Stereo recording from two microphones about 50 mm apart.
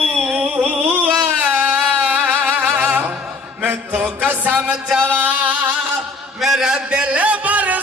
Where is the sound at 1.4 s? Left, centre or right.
Right.